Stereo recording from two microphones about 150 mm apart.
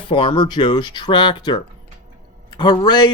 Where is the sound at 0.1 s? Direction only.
35° left (ahead or behind).